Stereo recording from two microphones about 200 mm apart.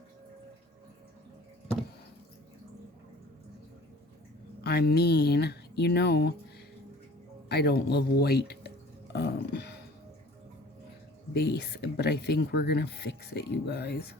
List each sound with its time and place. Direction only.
4.6 s speech: 50° left (ahead or behind)
7.4 s speech: 55° left (ahead or behind)
9.1 s a sound: 60° left (ahead or behind)
11.3 s speech: 55° left (ahead or behind)